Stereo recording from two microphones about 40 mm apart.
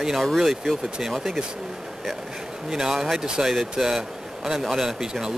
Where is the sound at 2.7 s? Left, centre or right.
Centre.